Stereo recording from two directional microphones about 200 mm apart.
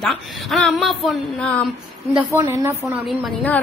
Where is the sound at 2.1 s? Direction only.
10° right (ahead or behind).